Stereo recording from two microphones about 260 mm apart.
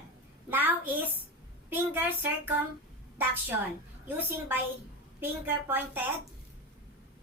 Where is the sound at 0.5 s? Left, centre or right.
Centre.